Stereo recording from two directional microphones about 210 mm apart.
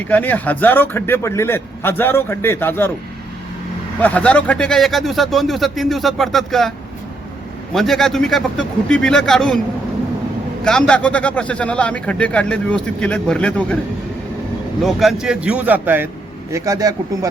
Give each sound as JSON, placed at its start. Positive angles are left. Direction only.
{"t": 0.1, "sound": "a man's voice", "side_deg": 10}
{"t": 4.0, "sound": "a man's voice", "side_deg": 5}
{"t": 10.6, "sound": "a man's voice", "side_deg": 5}
{"t": 14.8, "sound": "a man's voice", "side_deg": 0}